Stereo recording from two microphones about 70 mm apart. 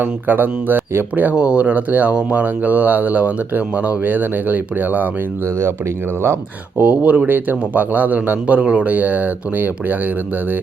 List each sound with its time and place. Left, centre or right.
0.0 s speech: right
6.8 s speech: right